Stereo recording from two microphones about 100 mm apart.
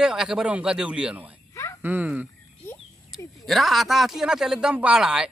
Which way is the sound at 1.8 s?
20° right (ahead or behind).